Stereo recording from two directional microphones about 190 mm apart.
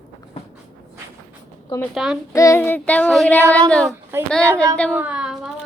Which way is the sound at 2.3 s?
15° left (ahead or behind).